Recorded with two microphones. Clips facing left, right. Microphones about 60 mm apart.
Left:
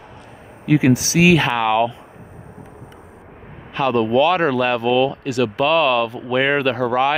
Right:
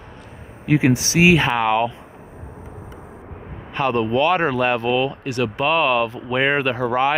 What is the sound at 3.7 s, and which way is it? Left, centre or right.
Speech, right.